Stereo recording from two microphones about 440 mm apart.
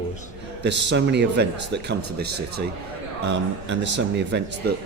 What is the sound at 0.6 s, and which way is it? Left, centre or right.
Speech, right.